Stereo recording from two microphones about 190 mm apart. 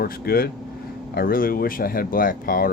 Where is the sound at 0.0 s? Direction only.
55° left (ahead or behind).